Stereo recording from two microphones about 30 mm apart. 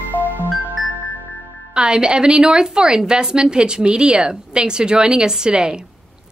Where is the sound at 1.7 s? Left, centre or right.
Right.